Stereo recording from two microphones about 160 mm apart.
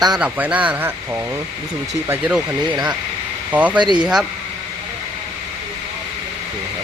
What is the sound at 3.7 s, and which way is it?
Speech, 30° right (ahead or behind).